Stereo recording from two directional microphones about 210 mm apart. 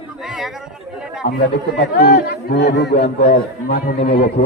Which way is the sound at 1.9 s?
45° left (ahead or behind).